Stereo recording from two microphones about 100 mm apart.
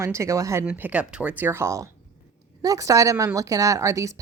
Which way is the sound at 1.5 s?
25° right (ahead or behind).